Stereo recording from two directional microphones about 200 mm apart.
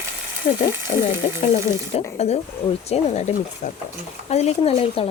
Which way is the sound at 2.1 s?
30° left (ahead or behind).